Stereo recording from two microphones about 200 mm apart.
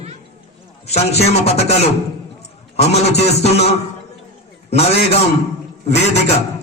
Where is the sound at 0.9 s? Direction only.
30° left (ahead or behind).